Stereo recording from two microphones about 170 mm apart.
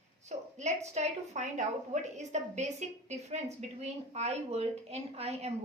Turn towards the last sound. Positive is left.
turn(degrees=-35)  # may be behind; listen again after turning